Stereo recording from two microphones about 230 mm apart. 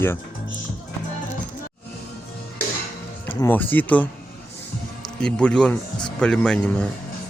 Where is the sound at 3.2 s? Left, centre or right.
Centre.